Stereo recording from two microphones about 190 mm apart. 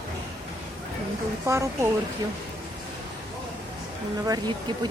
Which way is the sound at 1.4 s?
15° right (ahead or behind).